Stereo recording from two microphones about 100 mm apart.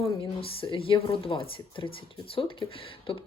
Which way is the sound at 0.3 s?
65° left (ahead or behind).